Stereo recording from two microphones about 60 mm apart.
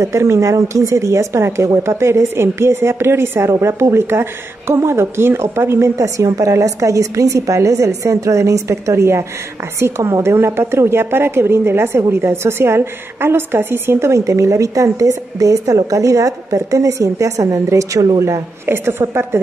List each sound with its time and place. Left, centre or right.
0.0 s speech: right
5.9 s a woman's voice: right
14.0 s a woman's voice: right
18.7 s speech: right